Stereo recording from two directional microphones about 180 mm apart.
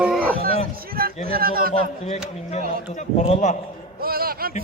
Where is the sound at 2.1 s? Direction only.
35° left (ahead or behind).